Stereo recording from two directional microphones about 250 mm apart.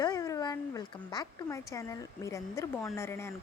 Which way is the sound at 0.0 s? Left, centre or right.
Centre.